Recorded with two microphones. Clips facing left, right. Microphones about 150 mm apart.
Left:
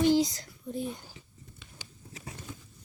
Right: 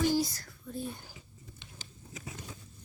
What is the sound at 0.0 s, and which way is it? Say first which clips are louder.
Whispering: left 5 dB; 20° left (ahead or behind).